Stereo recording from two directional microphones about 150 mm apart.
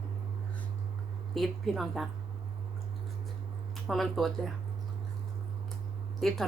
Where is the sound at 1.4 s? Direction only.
Centre (ahead or behind).